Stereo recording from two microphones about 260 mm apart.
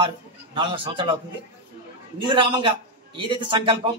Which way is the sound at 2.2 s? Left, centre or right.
Centre.